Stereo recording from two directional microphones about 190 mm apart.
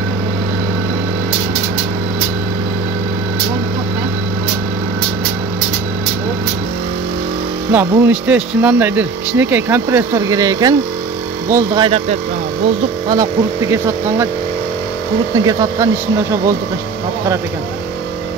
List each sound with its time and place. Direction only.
7.7 s speech: 10° right (ahead or behind)
13.1 s speech: 15° right (ahead or behind)
15.4 s speech: 15° right (ahead or behind)